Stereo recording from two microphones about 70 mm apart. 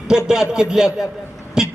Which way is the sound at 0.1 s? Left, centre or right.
Centre.